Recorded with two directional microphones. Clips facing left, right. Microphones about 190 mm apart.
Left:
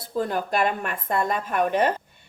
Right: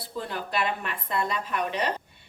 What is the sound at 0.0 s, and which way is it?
A woman's voice, 45° left (ahead or behind).